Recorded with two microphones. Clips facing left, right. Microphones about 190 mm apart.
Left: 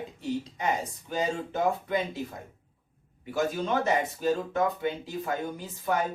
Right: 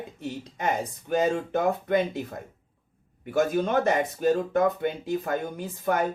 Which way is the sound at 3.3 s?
55° right (ahead or behind).